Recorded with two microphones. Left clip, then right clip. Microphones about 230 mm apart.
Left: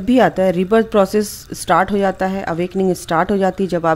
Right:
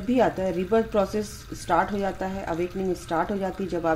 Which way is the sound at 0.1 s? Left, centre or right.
Left.